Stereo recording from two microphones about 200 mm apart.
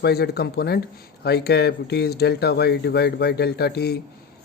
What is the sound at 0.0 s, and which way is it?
Speech, 50° left (ahead or behind).